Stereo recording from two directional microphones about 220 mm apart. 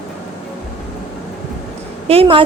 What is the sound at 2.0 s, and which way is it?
Speech, 25° right (ahead or behind).